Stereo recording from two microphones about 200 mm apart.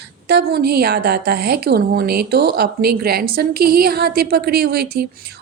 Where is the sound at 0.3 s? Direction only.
55° right (ahead or behind).